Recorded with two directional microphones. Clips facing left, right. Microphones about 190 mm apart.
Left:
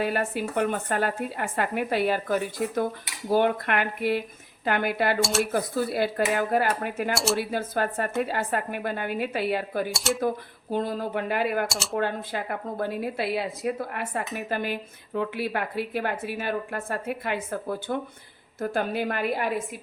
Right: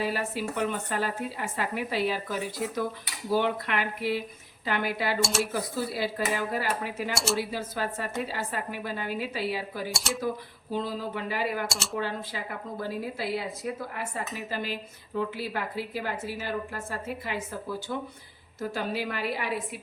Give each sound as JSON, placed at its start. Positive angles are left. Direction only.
{"t": 0.0, "sound": "a woman's voice", "side_deg": 55}
{"t": 5.2, "sound": "speech", "side_deg": 0}
{"t": 5.5, "sound": "a woman's voice", "side_deg": 55}
{"t": 7.1, "sound": "speech", "side_deg": 0}
{"t": 7.5, "sound": "a woman's voice", "side_deg": 55}
{"t": 9.9, "sound": "speech", "side_deg": 0}
{"t": 10.7, "sound": "a woman's voice", "side_deg": 50}
{"t": 11.7, "sound": "speech", "side_deg": 0}
{"t": 11.9, "sound": "a woman's voice", "side_deg": 55}